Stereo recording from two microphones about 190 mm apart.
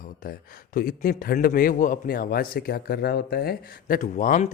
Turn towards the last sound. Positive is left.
turn(degrees=45)  # may be behind; listen again after turning